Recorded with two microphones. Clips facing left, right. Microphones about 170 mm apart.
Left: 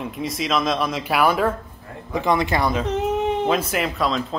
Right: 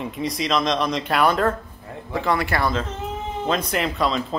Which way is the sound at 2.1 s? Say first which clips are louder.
Left 2 dB; 20° left (ahead or behind).